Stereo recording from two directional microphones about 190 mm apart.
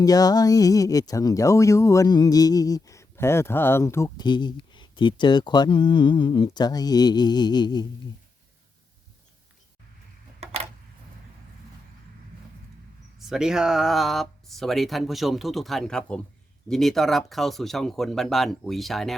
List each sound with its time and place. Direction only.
0.0 s speech: 20° left (ahead or behind)
10.4 s a sound: 35° right (ahead or behind)
13.1 s speech: centre (ahead or behind)